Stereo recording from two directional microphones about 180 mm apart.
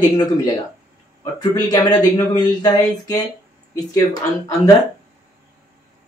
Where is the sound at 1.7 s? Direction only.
20° left (ahead or behind).